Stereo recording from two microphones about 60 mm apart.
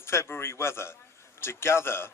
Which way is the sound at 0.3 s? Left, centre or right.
Left.